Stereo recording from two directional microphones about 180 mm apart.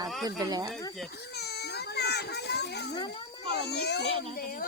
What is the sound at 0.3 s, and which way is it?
Speech, 20° right (ahead or behind).